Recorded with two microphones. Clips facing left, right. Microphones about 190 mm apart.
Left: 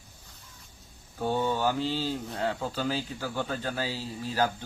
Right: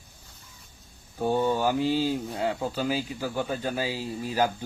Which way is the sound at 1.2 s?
15° right (ahead or behind).